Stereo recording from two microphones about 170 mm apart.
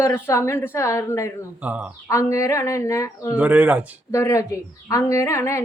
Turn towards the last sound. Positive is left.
turn(degrees=15)  # may be behind; listen again after turning